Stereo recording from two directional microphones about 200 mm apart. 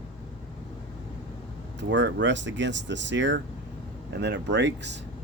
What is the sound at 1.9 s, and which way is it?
Speech, 60° right (ahead or behind).